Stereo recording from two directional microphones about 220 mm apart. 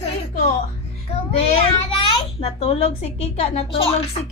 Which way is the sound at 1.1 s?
25° left (ahead or behind).